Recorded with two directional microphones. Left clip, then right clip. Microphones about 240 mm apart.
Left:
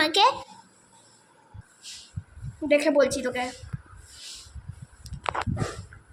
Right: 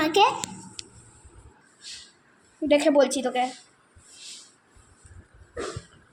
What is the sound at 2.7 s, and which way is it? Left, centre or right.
Speech, centre.